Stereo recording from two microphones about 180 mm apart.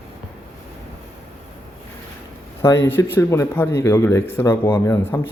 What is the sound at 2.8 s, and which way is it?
Speech, 15° left (ahead or behind).